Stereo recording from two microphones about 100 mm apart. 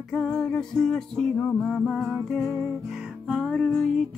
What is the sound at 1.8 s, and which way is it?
Music, centre (ahead or behind).